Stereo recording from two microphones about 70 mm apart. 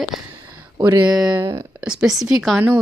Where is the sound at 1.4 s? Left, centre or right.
Right.